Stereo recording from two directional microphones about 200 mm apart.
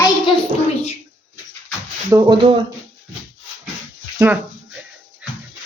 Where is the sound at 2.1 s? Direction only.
25° right (ahead or behind).